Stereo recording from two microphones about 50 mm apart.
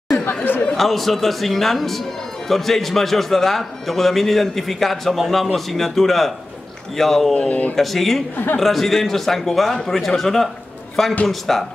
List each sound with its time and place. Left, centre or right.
0.2 s chatter: left
0.7 s speech: centre
7.3 s speech: left
7.7 s speech: centre